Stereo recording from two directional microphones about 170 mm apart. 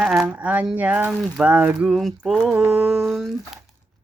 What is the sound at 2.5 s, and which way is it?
Speech, 10° right (ahead or behind).